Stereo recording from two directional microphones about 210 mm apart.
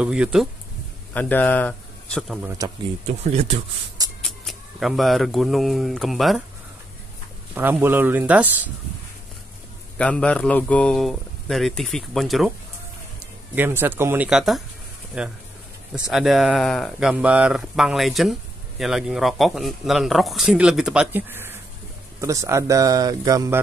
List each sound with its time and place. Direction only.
0.0 s speech: 5° right (ahead or behind)
1.1 s speech: 10° left (ahead or behind)
3.1 s speech: 30° right (ahead or behind)
4.2 s speech: centre (ahead or behind)
7.5 s speech: 10° right (ahead or behind)
9.9 s speech: 5° left (ahead or behind)
13.6 s speech: 10° right (ahead or behind)